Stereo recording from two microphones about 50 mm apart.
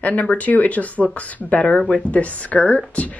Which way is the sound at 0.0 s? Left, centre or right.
Left.